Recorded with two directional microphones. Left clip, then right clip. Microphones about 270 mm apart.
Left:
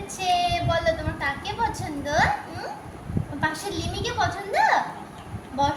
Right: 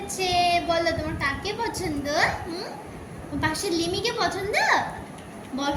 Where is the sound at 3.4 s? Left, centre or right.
Centre.